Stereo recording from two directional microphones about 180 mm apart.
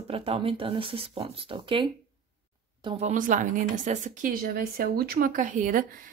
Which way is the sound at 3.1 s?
45° right (ahead or behind).